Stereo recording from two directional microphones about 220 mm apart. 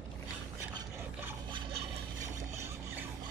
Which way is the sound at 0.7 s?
20° right (ahead or behind).